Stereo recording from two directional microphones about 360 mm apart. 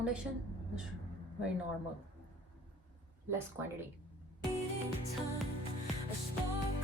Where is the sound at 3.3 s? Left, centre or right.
Centre.